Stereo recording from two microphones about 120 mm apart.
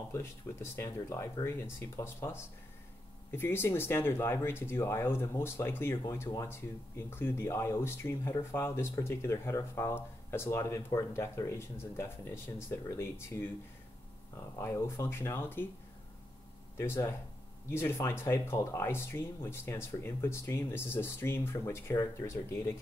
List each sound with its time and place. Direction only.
0.1 s speech: 25° left (ahead or behind)
14.6 s speech: 20° left (ahead or behind)
16.7 s speech: 20° left (ahead or behind)